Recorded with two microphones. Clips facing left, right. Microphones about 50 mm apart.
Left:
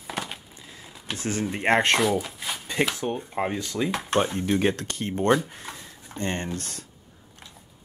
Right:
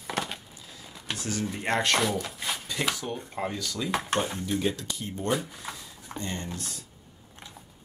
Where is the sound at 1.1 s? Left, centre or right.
Left.